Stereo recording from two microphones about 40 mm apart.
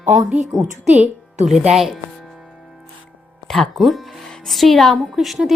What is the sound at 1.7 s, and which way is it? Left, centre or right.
Speech, centre.